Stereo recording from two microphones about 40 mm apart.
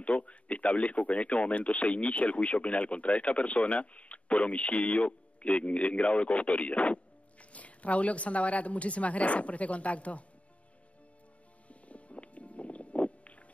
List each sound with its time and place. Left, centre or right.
0.0 s speech: left
11.7 s music: left